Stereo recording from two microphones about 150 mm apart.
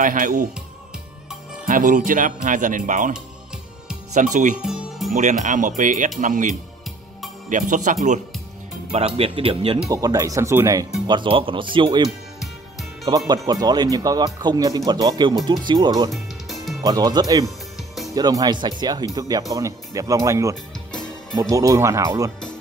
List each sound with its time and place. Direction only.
0.0 s speech: 65° right (ahead or behind)
1.7 s speech: 65° right (ahead or behind)
4.1 s speech: 55° right (ahead or behind)
4.6 s music: 5° right (ahead or behind)
5.1 s speech: 55° right (ahead or behind)
8.9 s speech: 40° right (ahead or behind)
9.8 s speech: 25° right (ahead or behind)
11.1 s speech: 35° right (ahead or behind)
13.3 s speech: 25° right (ahead or behind)
16.1 s music: centre (ahead or behind)
16.8 s speech: 25° right (ahead or behind)